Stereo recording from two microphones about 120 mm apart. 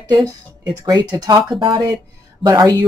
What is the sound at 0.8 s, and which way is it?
Speech, 35° right (ahead or behind).